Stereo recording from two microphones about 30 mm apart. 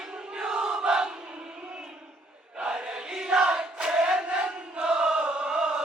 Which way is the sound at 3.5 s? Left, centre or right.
Right.